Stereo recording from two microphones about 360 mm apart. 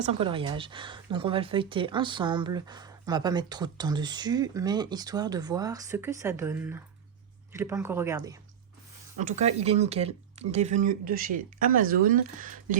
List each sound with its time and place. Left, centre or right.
0.0 s speech: centre